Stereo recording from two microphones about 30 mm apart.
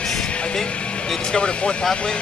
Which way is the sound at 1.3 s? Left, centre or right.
Left.